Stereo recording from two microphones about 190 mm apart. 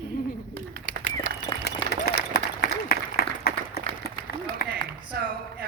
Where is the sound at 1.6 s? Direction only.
55° left (ahead or behind).